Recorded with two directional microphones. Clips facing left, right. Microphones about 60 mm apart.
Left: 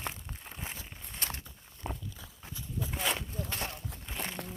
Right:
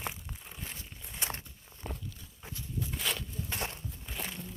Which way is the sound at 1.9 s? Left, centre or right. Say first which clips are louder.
Left 3 dB; centre.